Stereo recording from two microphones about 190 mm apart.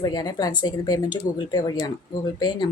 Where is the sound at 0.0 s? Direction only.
20° left (ahead or behind).